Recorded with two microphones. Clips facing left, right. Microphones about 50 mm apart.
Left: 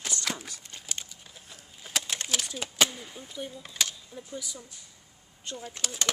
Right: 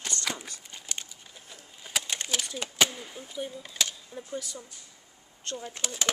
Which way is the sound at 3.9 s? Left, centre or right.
Centre.